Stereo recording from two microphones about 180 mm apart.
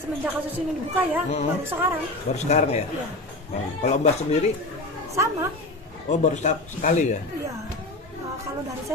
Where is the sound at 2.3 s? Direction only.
40° left (ahead or behind).